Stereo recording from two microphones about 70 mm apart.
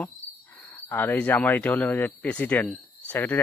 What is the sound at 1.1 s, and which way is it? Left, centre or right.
Speech, centre.